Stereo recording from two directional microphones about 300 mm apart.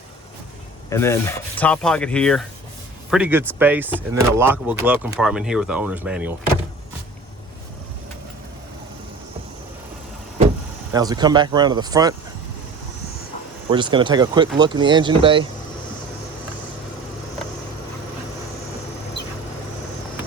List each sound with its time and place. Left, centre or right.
0.9 s rub: centre
1.5 s speech: centre
10.9 s speech: centre
13.7 s speech: centre